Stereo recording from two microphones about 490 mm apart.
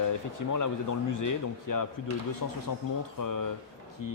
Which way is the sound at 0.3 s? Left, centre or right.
Left.